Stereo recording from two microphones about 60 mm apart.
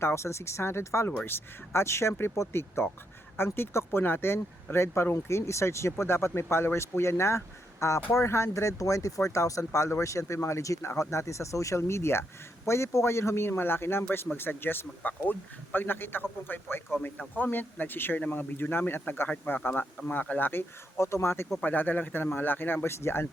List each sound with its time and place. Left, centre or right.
0.0 s speech: left
11.8 s speech: left
20.5 s speech: left
21.6 s speech: left